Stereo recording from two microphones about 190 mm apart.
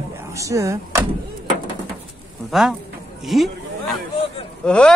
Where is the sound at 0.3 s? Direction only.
15° right (ahead or behind).